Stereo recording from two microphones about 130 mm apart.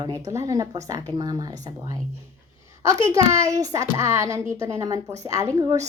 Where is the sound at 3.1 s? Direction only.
25° right (ahead or behind).